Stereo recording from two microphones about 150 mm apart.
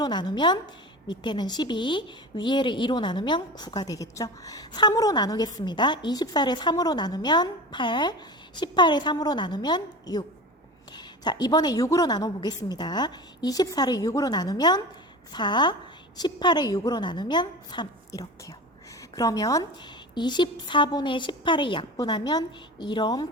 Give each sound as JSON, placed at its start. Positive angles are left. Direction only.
{"t": 0.0, "sound": "speech", "side_deg": 30}